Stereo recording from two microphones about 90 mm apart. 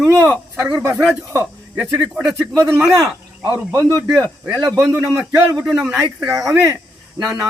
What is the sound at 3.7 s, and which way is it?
A man's voice, 40° right (ahead or behind).